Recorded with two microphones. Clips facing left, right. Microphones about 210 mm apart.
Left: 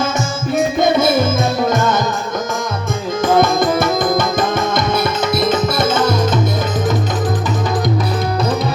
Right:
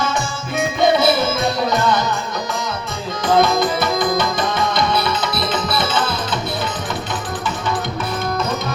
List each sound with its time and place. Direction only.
0.9 s music: 50° left (ahead or behind)
3.4 s music: 50° left (ahead or behind)